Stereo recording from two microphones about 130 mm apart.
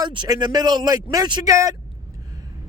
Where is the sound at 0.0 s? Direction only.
35° right (ahead or behind).